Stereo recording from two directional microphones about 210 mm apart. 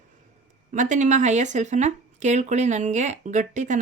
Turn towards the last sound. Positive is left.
turn(degrees=-35)  # may be behind; listen again after turning